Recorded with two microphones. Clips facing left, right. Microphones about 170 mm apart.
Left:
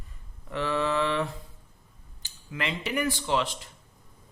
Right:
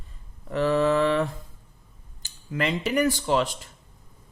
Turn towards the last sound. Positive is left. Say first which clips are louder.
# right 5 dB
turn(degrees=-45)  # may be behind; listen again after turning